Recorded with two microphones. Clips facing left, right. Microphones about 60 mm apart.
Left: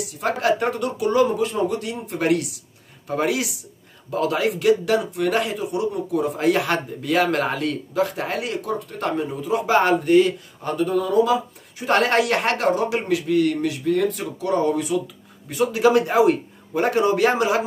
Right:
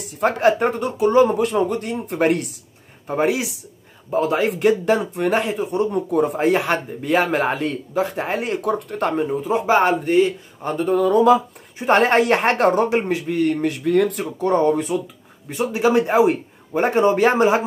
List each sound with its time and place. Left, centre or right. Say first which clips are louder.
0.2 s a man's voice: right 4 dB; right
1.2 s speech: right 3 dB; right
3.1 s a man's voice: right 2 dB; right
6.4 s a man's voice: right 1 dB; right
9.7 s a man's voice: even; right
11.0 s speech: right 5 dB; right
11.8 s speech: right 3 dB; right
12.5 s speech: right 4 dB; right
13.1 s speech: left 1 dB; right
14.2 s speech: right 3 dB; right
15.5 s a man's voice: even; right